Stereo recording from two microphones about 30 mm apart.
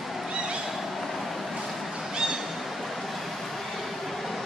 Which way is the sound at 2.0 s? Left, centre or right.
Centre.